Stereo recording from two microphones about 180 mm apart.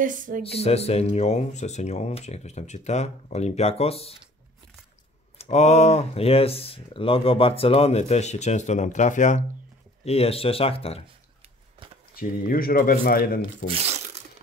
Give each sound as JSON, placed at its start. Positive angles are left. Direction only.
{"t": 0.0, "sound": "speech", "side_deg": -45}
{"t": 0.4, "sound": "speech", "side_deg": 35}
{"t": 5.4, "sound": "speech", "side_deg": 40}
{"t": 12.2, "sound": "speech", "side_deg": 55}
{"t": 13.7, "sound": "tearing", "side_deg": -35}